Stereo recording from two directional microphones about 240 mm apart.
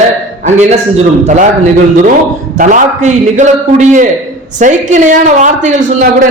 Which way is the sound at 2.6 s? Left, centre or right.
Right.